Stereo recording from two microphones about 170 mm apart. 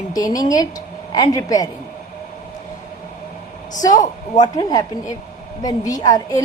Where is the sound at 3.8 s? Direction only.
20° left (ahead or behind).